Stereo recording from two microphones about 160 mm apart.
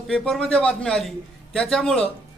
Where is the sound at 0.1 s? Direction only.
5° left (ahead or behind).